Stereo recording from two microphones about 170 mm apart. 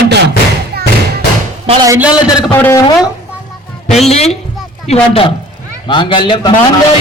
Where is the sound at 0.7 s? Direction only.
65° right (ahead or behind).